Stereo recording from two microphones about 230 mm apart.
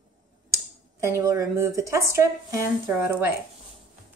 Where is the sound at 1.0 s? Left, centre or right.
Centre.